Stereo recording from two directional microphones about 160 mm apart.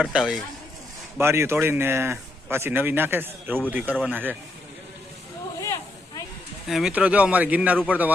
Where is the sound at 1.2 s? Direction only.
15° right (ahead or behind).